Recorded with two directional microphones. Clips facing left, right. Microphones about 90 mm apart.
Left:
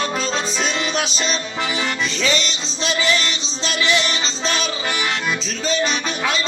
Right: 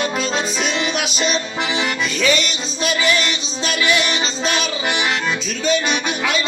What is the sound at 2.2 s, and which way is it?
Music, 30° left (ahead or behind).